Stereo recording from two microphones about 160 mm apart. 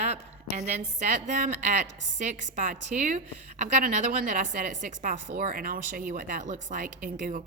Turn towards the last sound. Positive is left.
turn(degrees=-60)  # may be behind; listen again after turning